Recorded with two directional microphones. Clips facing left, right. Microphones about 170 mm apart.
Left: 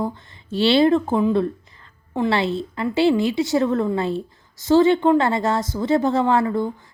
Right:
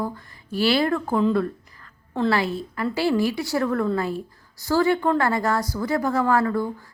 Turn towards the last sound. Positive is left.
turn(degrees=20)  # may be behind; listen again after turning